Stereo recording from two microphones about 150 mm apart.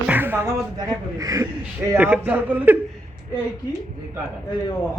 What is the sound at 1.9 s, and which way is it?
Speech, 10° right (ahead or behind).